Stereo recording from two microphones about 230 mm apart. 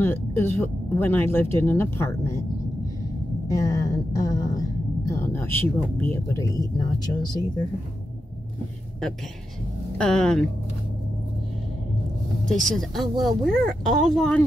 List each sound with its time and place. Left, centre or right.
0.0 s a woman's voice: centre
3.4 s a woman's voice: centre
9.9 s speech: centre
12.4 s speech: centre